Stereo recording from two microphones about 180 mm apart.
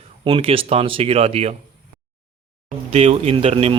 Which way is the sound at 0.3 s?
30° right (ahead or behind).